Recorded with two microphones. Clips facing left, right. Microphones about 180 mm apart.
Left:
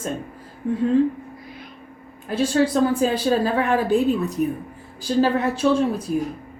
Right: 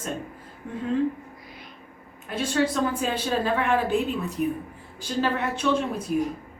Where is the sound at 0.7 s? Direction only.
30° left (ahead or behind).